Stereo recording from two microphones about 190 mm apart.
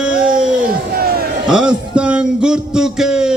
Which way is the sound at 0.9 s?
55° right (ahead or behind).